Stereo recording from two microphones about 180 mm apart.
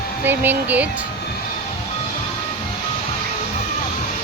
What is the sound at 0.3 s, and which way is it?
Speech, 10° right (ahead or behind).